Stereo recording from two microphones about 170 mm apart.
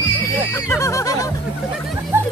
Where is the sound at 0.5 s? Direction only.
15° left (ahead or behind).